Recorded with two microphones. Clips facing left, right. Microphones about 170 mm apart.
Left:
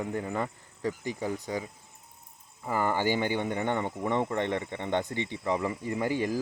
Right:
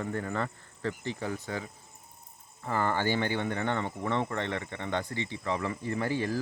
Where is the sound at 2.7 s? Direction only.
10° left (ahead or behind).